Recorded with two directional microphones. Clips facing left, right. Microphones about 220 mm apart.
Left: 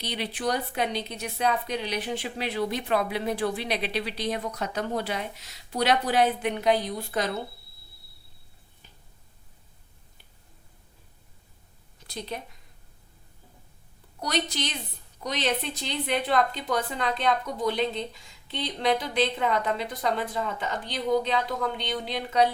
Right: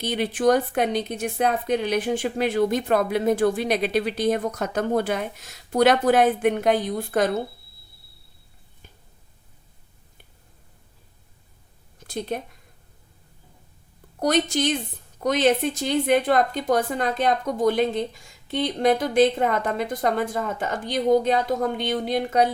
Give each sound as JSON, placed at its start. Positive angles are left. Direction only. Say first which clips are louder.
{"t": 0.0, "sound": "a woman's voice", "louder": "right 9 dB", "side_deg": -50}
{"t": 11.9, "sound": "a sound", "louder": "right 7 dB", "side_deg": -50}
{"t": 14.2, "sound": "a woman's voice", "louder": "right 8 dB", "side_deg": -50}